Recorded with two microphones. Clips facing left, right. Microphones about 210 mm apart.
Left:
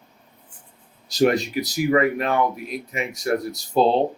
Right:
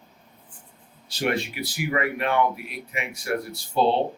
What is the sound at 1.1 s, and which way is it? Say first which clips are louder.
Speech: left 7 dB; 40° left (ahead or behind).